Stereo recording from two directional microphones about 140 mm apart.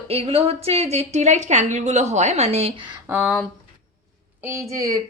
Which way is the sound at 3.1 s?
20° right (ahead or behind).